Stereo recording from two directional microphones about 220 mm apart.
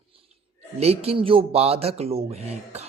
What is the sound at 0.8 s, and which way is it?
Speech, 30° right (ahead or behind).